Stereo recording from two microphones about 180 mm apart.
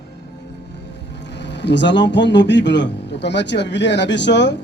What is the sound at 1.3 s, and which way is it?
Speech, 75° left (ahead or behind).